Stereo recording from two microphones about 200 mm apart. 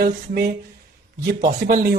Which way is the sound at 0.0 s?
50° right (ahead or behind).